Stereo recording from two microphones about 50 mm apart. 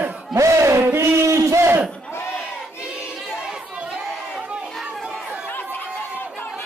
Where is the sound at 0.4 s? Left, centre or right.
Right.